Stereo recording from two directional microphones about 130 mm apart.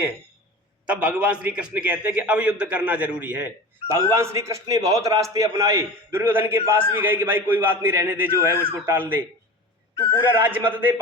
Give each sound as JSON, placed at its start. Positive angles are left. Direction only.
{"t": 0.9, "sound": "a man's voice", "side_deg": -10}
{"t": 10.7, "sound": "a man's voice", "side_deg": -15}